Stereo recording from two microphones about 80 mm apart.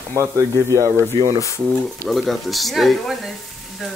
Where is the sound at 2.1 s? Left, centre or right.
Centre.